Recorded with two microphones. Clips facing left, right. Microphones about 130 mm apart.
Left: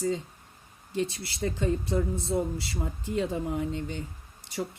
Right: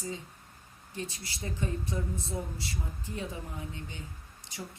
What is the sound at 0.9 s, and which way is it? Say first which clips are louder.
Speech: left 9 dB; 70° left (ahead or behind).